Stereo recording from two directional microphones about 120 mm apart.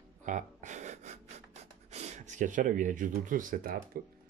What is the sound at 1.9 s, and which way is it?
Speech, 70° right (ahead or behind).